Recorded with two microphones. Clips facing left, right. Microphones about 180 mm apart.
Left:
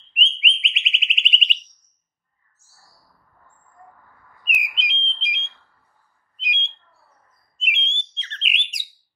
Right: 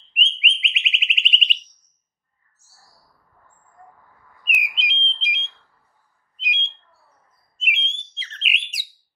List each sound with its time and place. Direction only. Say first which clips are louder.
0.1 s alarm: even; centre (ahead or behind)
4.6 s bird: right 2 dB; centre (ahead or behind)